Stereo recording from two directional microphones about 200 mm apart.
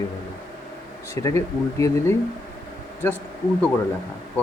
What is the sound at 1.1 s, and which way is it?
Speech, 15° left (ahead or behind).